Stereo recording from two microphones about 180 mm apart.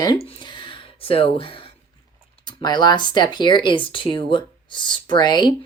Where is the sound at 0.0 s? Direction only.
25° left (ahead or behind).